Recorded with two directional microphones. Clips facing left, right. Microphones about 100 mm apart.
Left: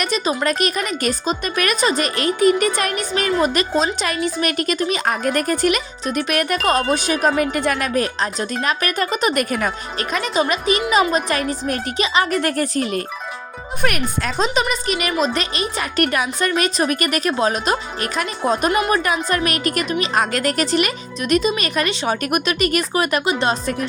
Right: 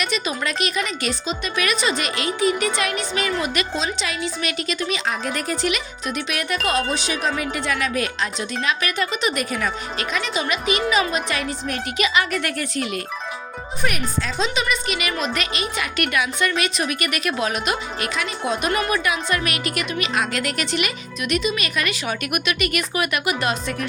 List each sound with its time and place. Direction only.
0.0 s speech: 40° left (ahead or behind)
11.9 s speech: 30° left (ahead or behind)
13.8 s speech: 65° left (ahead or behind)
14.3 s speech: 40° left (ahead or behind)